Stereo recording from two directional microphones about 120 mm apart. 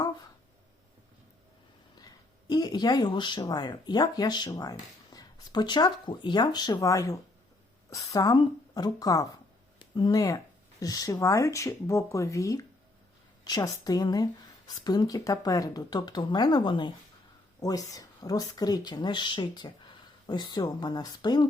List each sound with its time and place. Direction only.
2.0 s a sound: 35° left (ahead or behind)
3.4 s speech: 35° left (ahead or behind)
17.6 s speech: 30° left (ahead or behind)